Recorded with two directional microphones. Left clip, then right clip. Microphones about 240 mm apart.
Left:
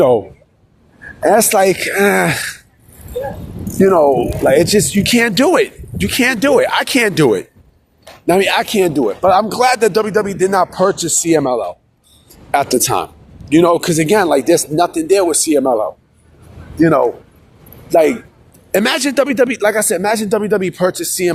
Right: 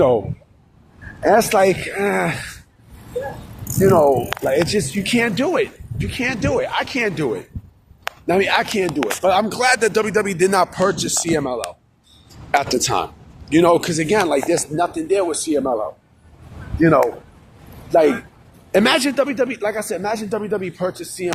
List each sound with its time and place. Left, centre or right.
1.2 s speech: left
3.8 s speech: left; by 10.8 s centre
10.8 s speech: left
18.7 s speech: left